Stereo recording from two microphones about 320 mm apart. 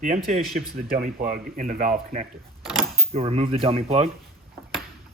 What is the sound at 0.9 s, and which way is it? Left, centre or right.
Speech, right.